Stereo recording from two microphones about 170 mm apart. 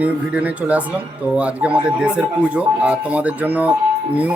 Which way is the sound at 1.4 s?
10° right (ahead or behind).